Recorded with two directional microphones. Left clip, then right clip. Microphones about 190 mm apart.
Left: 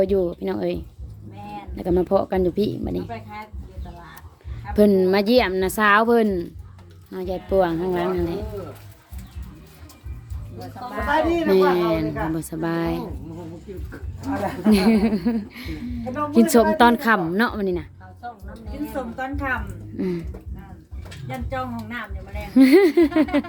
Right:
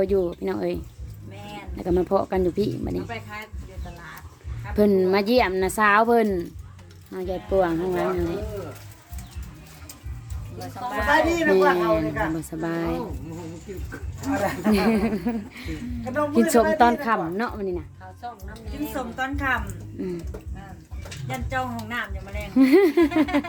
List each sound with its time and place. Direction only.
0.0 s a woman's voice: centre (ahead or behind)
4.7 s a woman's voice: 5° left (ahead or behind)
10.6 s a woman's voice: 10° left (ahead or behind)
11.4 s a woman's voice: 10° left (ahead or behind)
14.3 s a woman's voice: centre (ahead or behind); by 17.8 s 25° left (ahead or behind)
18.9 s a woman's voice: 15° right (ahead or behind)
20.0 s a woman's voice: 25° left (ahead or behind)
21.2 s a woman's voice: 15° right (ahead or behind)
22.5 s a woman's voice: 15° left (ahead or behind)